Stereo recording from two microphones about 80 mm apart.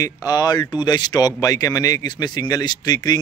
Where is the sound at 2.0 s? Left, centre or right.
Left.